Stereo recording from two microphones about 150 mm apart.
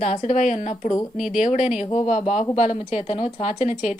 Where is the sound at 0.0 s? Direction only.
45° left (ahead or behind).